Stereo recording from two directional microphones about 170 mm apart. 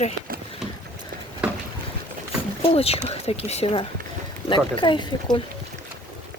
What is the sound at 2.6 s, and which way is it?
Speech, 35° left (ahead or behind).